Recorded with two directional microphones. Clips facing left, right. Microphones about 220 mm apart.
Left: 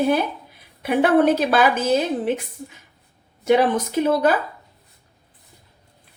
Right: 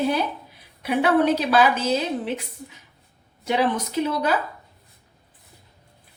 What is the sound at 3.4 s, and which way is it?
Speech, 50° left (ahead or behind).